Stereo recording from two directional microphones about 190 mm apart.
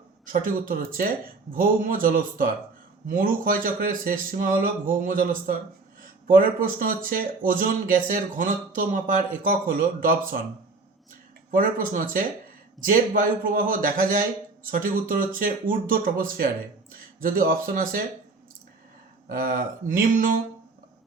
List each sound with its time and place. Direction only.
0.3 s speech: 45° right (ahead or behind)
11.5 s speech: 45° right (ahead or behind)
19.3 s speech: 50° right (ahead or behind)